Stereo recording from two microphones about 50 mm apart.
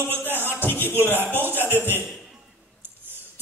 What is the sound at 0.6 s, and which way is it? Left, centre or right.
Speech, left.